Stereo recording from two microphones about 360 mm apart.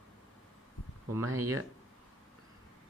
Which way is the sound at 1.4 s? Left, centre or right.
Right.